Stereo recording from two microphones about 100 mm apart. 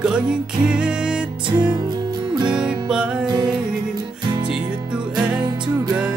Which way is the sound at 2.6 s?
10° right (ahead or behind).